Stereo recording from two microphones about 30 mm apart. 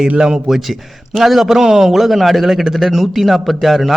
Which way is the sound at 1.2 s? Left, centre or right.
Centre.